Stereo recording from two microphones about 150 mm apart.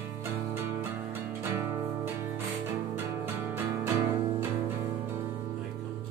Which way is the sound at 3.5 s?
15° right (ahead or behind).